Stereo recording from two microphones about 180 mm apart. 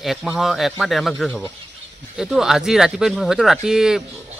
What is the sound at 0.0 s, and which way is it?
Speech, centre (ahead or behind).